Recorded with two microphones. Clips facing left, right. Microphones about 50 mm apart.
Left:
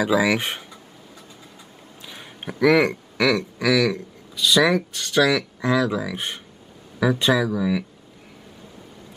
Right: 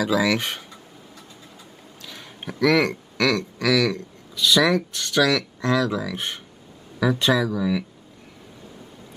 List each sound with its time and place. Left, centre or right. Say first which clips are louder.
0.0 s speech: left 1 dB; centre
2.0 s speech: left 1 dB; centre